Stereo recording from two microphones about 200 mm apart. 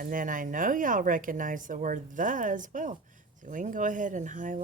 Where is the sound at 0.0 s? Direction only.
45° right (ahead or behind).